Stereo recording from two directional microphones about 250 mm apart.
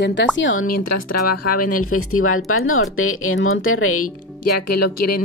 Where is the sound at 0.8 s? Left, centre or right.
Left.